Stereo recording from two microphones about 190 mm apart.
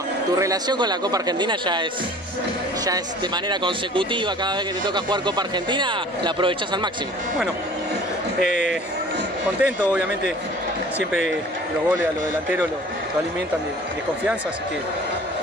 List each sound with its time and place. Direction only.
0.4 s speech: 20° right (ahead or behind)
3.4 s speech: 25° right (ahead or behind)
9.6 s speech: 5° right (ahead or behind)
12.0 s speech: 10° right (ahead or behind)